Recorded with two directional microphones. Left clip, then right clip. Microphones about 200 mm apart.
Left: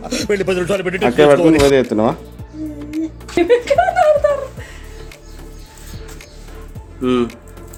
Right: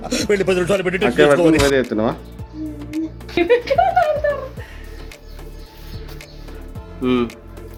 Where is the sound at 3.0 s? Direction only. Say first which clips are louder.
Left 2 dB; centre (ahead or behind).